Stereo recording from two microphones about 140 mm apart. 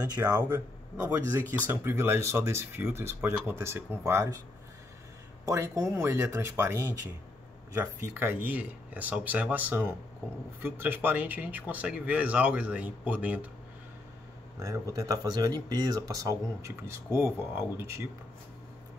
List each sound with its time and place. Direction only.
0.5 s a man's voice: 15° right (ahead or behind)
5.4 s speech: 20° right (ahead or behind)
14.6 s speech: 25° right (ahead or behind)